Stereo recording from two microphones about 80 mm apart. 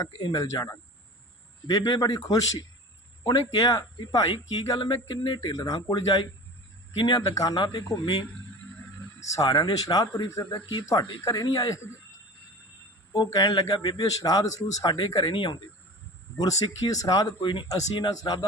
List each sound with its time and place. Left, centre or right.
0.0 s speech: left
5.0 s speech: left
6.9 s speech: left
7.2 s speech: left
9.2 s speech: left
11.3 s speech: left
13.1 s speech: left
14.9 s speech: left
16.4 s speech: left